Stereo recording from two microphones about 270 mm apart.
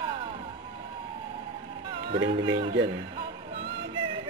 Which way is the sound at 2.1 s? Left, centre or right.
Centre.